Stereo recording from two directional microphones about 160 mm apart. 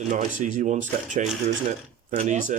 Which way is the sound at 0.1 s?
50° right (ahead or behind).